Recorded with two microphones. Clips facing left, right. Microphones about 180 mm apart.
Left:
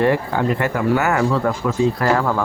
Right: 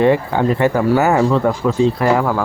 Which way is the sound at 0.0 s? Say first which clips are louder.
Right 4 dB; 20° right (ahead or behind).